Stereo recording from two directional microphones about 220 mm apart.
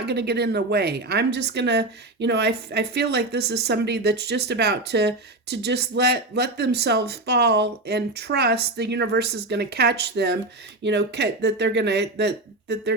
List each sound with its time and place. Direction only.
0.0 s a woman's voice: 50° right (ahead or behind)